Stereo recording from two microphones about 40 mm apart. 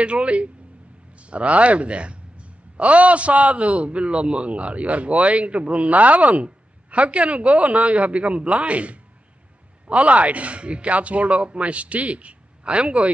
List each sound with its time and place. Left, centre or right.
0.0 s speech: right